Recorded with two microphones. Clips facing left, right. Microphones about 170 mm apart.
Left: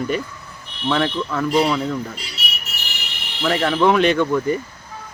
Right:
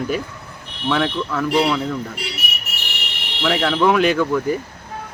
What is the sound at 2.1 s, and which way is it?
Speech, 70° right (ahead or behind).